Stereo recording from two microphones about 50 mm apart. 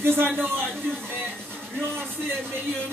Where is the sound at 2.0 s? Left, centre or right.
Right.